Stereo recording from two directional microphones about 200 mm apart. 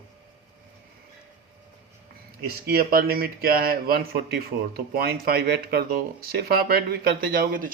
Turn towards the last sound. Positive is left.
turn(degrees=-45)  # may be behind; listen again after turning